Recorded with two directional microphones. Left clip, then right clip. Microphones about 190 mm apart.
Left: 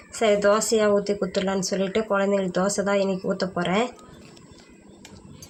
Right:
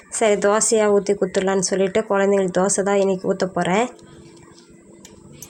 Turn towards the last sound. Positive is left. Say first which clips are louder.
# right 4 dB
turn(degrees=-35)  # may be behind; listen again after turning